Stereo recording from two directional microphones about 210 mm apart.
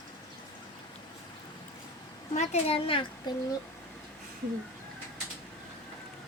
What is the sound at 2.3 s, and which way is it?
Speech, 35° left (ahead or behind).